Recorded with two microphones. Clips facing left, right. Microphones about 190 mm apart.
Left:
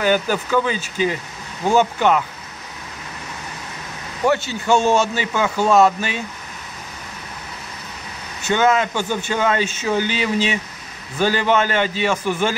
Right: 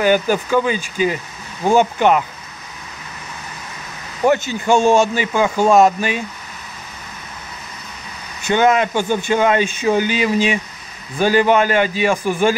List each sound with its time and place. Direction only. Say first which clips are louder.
0.0 s speech: right 3 dB; 10° right (ahead or behind)
4.3 s speech: right 2 dB; 15° right (ahead or behind)
8.5 s speech: right 2 dB; 15° right (ahead or behind)